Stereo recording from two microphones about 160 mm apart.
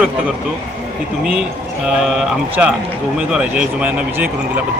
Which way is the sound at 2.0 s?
5° right (ahead or behind).